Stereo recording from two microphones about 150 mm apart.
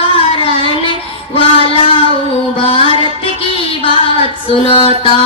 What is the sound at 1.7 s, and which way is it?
Music, 40° left (ahead or behind).